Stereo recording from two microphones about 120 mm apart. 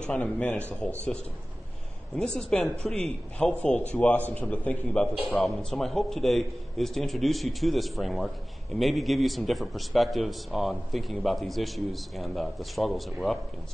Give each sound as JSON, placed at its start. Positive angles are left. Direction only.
{"t": 0.0, "sound": "a man's voice", "side_deg": 10}
{"t": 2.1, "sound": "a man's voice", "side_deg": 5}